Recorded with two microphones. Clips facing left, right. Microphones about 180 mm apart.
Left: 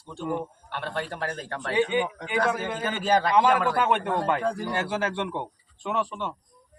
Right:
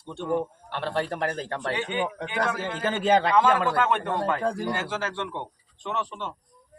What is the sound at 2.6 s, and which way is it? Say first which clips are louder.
Speech: right 2 dB; 25° right (ahead or behind).